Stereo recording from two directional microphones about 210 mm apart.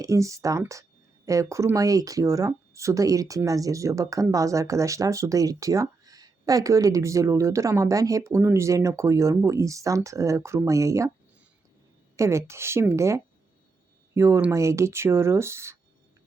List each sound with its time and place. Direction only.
0.0 s speech: 15° right (ahead or behind)
12.1 s speech: 15° right (ahead or behind)